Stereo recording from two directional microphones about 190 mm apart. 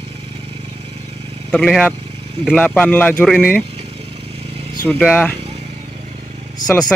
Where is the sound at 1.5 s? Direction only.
5° left (ahead or behind).